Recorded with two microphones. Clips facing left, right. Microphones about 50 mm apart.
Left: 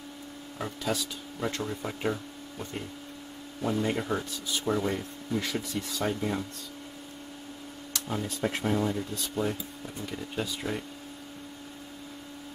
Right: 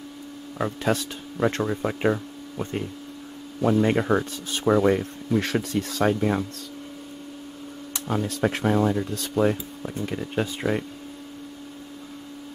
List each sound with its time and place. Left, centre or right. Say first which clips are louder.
0.8 s speech: right 5 dB; right
3.8 s speech: right 8 dB; right
4.6 s speech: right 10 dB; right
8.1 s speech: right 7 dB; right
9.8 s speech: right 9 dB; right